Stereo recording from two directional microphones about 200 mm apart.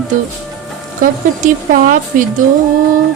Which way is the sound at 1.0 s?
45° right (ahead or behind).